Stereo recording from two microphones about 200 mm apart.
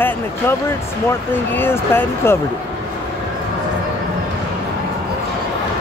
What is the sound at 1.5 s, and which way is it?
Speech, 10° left (ahead or behind).